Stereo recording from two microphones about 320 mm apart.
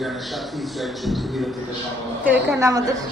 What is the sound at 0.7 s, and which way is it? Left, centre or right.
Music, centre.